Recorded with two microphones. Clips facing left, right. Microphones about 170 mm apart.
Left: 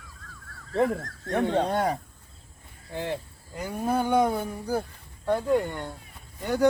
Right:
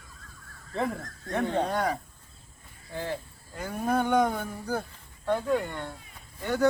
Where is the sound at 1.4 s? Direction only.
20° left (ahead or behind).